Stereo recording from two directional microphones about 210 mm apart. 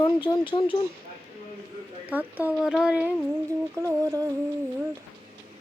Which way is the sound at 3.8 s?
15° right (ahead or behind).